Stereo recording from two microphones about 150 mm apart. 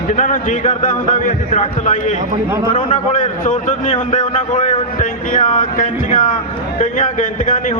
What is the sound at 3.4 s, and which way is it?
Speech, 60° left (ahead or behind).